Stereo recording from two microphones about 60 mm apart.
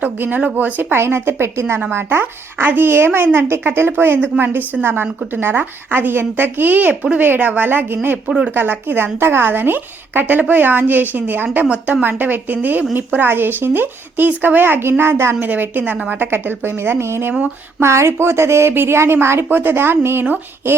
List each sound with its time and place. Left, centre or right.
0.0 s a woman's voice: right
8.3 s speech: centre
8.5 s a woman's voice: right
11.6 s speech: centre
12.0 s a woman's voice: right
15.4 s a woman's voice: right